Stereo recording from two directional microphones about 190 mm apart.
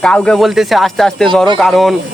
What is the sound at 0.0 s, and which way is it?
Speech, 5° left (ahead or behind).